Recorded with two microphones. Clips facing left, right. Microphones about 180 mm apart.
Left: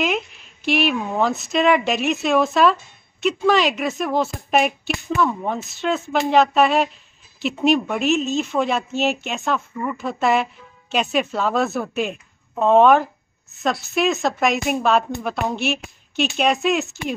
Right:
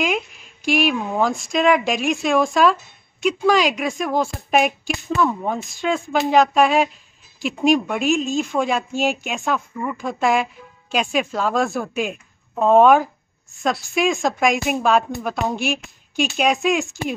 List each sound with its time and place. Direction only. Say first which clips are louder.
0.0 s speech: even; centre (ahead or behind)